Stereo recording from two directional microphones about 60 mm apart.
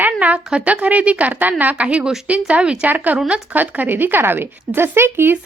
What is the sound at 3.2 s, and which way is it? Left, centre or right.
Speech, centre.